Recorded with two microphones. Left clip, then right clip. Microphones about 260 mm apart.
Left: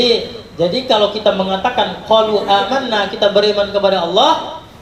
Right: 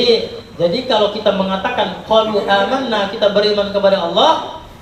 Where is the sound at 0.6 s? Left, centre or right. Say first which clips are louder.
Left 1 dB; left.